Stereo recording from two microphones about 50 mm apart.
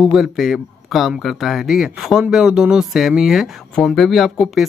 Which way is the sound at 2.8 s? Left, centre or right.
Centre.